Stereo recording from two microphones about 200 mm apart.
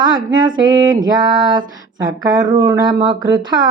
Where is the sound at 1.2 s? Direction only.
20° right (ahead or behind).